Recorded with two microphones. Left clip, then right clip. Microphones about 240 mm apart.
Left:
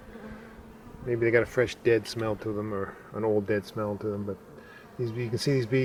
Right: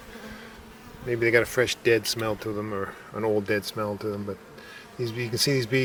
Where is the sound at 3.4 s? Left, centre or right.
Centre.